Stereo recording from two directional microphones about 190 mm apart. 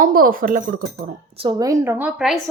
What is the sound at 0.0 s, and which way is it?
Speech, 50° right (ahead or behind).